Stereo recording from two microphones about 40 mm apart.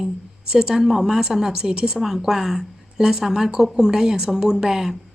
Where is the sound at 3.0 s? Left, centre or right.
Centre.